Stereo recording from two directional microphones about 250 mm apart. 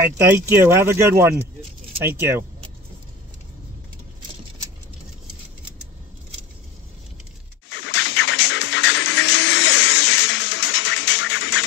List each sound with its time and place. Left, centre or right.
0.3 s speech: centre
7.7 s music: left